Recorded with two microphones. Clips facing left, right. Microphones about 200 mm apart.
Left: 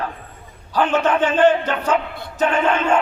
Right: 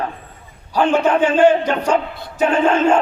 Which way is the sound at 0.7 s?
10° right (ahead or behind).